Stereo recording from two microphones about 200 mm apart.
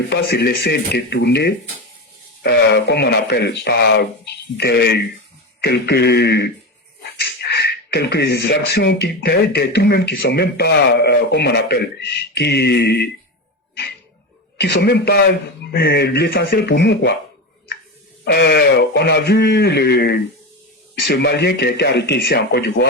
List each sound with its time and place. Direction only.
0.1 s speech: 55° left (ahead or behind)
14.6 s speech: 55° left (ahead or behind)
18.3 s speech: 55° left (ahead or behind)